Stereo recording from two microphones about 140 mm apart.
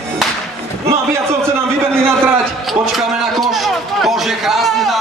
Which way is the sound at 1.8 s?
15° right (ahead or behind).